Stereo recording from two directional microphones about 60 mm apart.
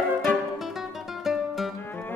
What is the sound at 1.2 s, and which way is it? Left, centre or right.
Music, centre.